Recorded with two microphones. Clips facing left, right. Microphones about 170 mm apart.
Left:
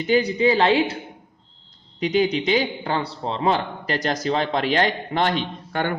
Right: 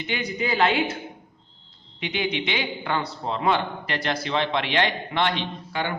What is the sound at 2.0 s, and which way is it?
A man's voice, 40° left (ahead or behind).